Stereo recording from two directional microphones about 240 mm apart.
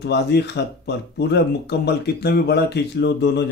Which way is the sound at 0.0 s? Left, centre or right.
Left.